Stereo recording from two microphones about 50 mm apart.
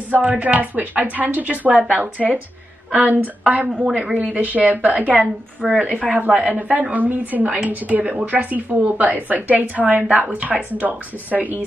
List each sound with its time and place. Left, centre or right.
0.1 s a woman's voice: right
2.9 s a woman's voice: right
5.8 s a woman's voice: right
6.2 s a woman's voice: right
8.0 s a woman's voice: right